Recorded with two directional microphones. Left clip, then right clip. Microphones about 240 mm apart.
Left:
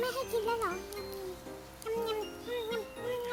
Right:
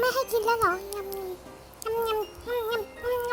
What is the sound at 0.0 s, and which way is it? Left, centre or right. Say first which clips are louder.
Music: right 8 dB; right.